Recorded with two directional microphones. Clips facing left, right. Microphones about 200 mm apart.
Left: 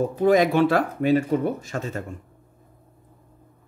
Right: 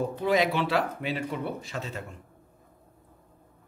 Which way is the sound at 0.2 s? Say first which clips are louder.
Left 8 dB; 50° left (ahead or behind).